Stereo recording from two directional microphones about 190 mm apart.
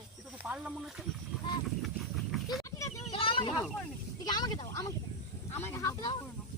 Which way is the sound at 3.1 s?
30° left (ahead or behind).